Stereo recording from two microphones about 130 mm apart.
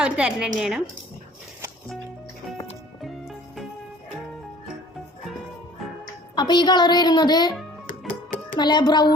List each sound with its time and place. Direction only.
0.0 s a woman's voice: 10° right (ahead or behind)
3.0 s music: centre (ahead or behind)
6.3 s a woman's voice: 35° left (ahead or behind)
7.9 s music: 85° left
8.5 s a woman's voice: 35° left (ahead or behind)